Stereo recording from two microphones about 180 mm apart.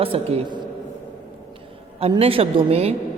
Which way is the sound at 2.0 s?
35° right (ahead or behind).